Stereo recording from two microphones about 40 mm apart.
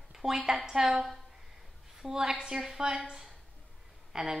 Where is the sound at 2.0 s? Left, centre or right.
Centre.